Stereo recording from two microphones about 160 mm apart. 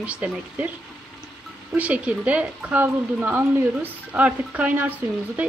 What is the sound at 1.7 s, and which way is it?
A woman's voice, 10° right (ahead or behind).